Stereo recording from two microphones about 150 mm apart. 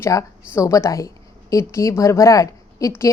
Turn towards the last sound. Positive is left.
turn(degrees=20)  # may be behind; listen again after turning